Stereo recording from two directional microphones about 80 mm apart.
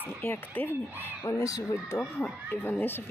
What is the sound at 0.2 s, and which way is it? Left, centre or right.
Speech, left.